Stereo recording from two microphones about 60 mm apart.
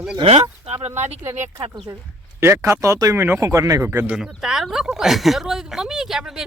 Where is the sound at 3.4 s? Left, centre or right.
Right.